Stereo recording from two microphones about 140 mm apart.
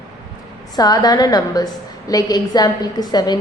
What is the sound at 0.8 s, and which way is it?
A woman's voice, 30° left (ahead or behind).